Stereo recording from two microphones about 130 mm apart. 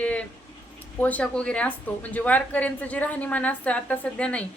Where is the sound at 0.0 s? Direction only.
10° left (ahead or behind).